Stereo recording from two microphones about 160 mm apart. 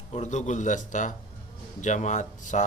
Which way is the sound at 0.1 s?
45° left (ahead or behind).